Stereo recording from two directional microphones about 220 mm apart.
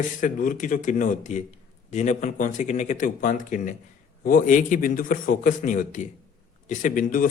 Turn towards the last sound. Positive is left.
turn(degrees=35)  # may be behind; listen again after turning